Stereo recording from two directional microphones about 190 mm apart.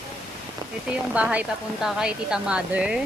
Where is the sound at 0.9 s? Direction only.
5° right (ahead or behind).